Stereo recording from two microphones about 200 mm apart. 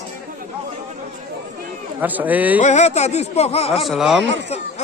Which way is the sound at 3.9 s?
Centre (ahead or behind).